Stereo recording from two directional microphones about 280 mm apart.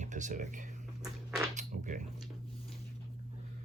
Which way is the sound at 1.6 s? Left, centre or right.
Right.